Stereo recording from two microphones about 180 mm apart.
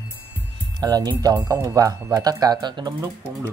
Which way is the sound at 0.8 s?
20° right (ahead or behind).